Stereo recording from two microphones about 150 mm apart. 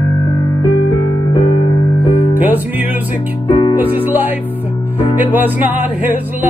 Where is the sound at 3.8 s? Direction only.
10° right (ahead or behind).